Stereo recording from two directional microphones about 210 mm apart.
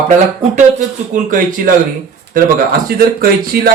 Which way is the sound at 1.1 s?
35° right (ahead or behind).